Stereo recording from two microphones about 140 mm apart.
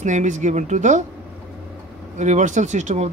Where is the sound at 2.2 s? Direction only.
60° right (ahead or behind).